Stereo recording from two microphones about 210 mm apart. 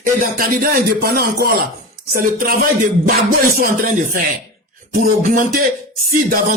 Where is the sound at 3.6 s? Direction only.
40° right (ahead or behind).